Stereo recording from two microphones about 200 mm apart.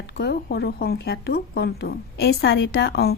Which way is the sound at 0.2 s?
55° left (ahead or behind).